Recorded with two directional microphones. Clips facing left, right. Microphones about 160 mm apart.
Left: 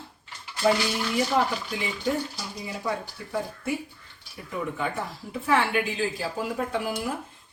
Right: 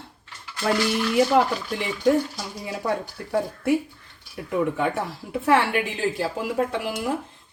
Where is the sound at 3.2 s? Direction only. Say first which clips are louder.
Right 6 dB; 65° right (ahead or behind).